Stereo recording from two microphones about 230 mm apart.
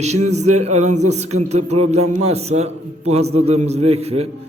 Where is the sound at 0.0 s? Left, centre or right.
Right.